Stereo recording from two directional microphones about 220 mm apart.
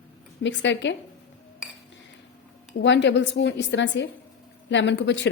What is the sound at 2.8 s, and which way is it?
Speech, 55° left (ahead or behind).